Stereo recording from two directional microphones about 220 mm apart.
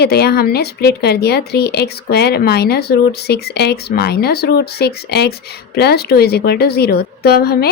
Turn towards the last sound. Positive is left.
turn(degrees=45)  # may be behind; listen again after turning